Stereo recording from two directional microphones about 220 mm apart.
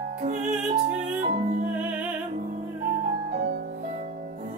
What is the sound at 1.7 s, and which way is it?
Music, 5° right (ahead or behind).